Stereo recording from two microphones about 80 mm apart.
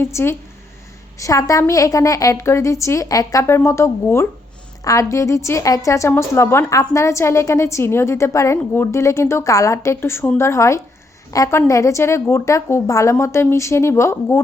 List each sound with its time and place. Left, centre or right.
0.0 s a woman's voice: left
1.2 s a woman's voice: left
3.4 s a woman's voice: left